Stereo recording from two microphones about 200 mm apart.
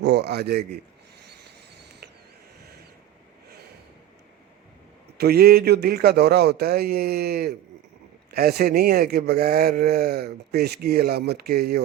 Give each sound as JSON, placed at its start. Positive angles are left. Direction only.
{"t": 0.0, "sound": "a man's voice", "side_deg": -55}
{"t": 1.2, "sound": "a sound", "side_deg": -55}
{"t": 5.1, "sound": "speech", "side_deg": -50}